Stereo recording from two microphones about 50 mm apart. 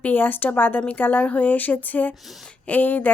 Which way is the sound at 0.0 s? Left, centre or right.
Left.